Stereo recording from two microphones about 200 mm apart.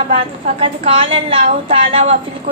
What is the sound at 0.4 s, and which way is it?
A woman's voice, 30° right (ahead or behind).